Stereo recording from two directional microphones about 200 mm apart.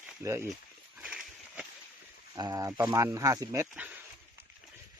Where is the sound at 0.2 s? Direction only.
15° right (ahead or behind).